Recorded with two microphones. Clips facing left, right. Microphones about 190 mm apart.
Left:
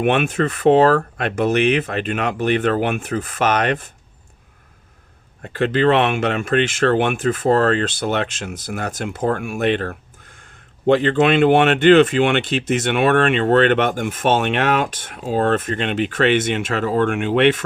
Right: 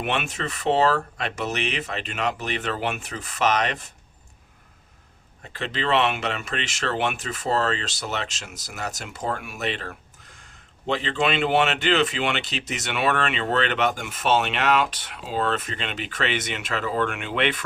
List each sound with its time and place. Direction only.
0.0 s speech: 55° left (ahead or behind)
5.4 s speech: 55° left (ahead or behind)